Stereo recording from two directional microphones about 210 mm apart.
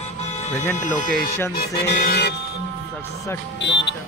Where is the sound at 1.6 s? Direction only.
50° left (ahead or behind).